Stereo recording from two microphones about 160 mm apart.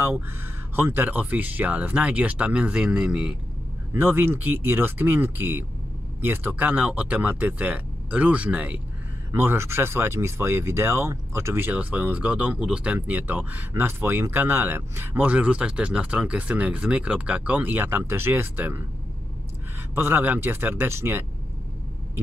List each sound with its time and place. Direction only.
0.7 s speech: 10° right (ahead or behind)
20.0 s speech: 10° right (ahead or behind)